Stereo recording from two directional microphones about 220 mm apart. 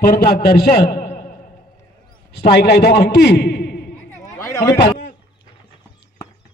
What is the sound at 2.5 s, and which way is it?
A man's voice, 45° left (ahead or behind).